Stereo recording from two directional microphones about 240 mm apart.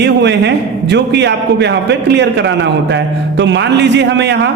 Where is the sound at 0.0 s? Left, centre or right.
Right.